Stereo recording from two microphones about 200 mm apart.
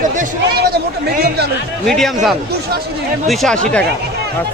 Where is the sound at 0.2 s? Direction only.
50° right (ahead or behind).